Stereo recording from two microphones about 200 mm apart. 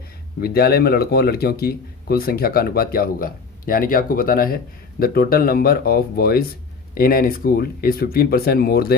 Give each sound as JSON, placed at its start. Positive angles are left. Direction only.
{"t": 0.3, "sound": "speech", "side_deg": 50}